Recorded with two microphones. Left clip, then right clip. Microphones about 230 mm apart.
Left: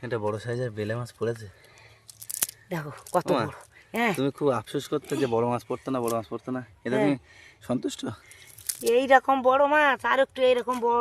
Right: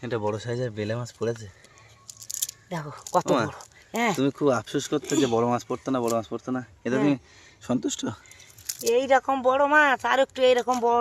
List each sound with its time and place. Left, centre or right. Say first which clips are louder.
0.0 s speech: right 1 dB; centre
2.5 s a sound: even; centre
3.1 s speech: right 2 dB; centre
4.3 s speech: right 2 dB; centre
9.0 s speech: left 2 dB; left; by 11.0 s centre